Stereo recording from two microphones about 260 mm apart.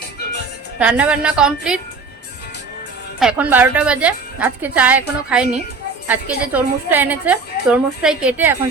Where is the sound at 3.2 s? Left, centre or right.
Centre.